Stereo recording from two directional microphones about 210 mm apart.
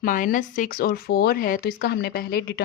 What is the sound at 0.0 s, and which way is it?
A woman's voice, 40° left (ahead or behind).